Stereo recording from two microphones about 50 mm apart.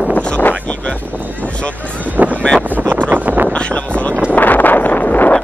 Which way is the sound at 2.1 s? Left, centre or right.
Right.